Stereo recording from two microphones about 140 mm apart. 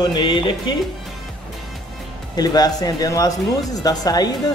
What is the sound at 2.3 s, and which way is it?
Speech, 30° left (ahead or behind).